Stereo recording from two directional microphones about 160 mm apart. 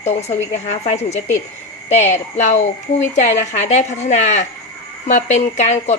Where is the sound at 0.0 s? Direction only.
45° left (ahead or behind).